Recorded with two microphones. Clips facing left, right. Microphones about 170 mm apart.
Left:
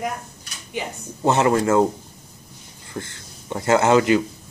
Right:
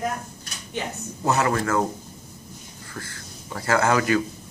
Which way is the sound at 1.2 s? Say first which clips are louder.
Left 5 dB; 25° left (ahead or behind).